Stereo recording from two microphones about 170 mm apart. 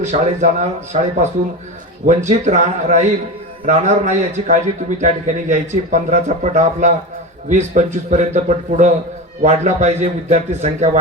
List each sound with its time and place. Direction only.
0.0 s a man's voice: 45° right (ahead or behind)